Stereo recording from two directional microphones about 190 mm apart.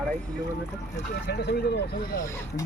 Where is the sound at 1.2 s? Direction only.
60° left (ahead or behind).